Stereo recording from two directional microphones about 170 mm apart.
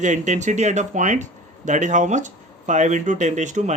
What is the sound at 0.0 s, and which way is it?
Speech, 45° right (ahead or behind).